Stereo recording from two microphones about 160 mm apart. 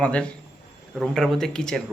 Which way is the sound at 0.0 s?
5° left (ahead or behind).